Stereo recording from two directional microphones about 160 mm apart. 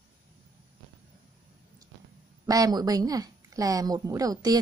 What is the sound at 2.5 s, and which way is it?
A woman's voice, 25° right (ahead or behind).